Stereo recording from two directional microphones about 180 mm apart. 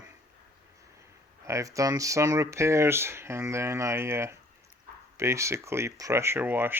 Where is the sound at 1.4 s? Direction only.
15° right (ahead or behind).